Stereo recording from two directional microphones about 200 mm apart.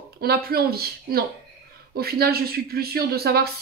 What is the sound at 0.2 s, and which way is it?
A woman's voice, 50° right (ahead or behind).